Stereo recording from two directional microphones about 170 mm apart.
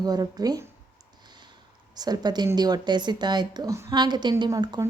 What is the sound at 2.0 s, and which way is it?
Speech, 25° right (ahead or behind).